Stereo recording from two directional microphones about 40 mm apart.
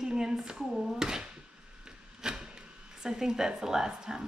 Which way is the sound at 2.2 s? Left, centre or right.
Centre.